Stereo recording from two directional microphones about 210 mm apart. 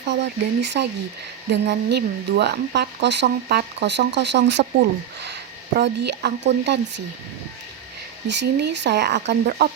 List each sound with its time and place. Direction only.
0.1 s speech: 55° right (ahead or behind)
8.3 s speech: 55° right (ahead or behind)